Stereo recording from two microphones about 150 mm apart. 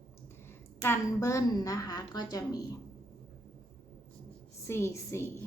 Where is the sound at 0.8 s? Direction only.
15° left (ahead or behind).